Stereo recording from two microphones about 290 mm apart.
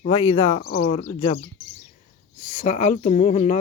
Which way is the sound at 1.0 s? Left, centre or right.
Centre.